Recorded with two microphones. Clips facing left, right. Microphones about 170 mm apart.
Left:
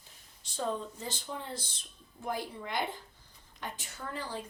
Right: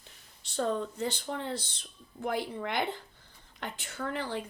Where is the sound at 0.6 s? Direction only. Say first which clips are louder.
Right 5 dB; 70° right (ahead or behind).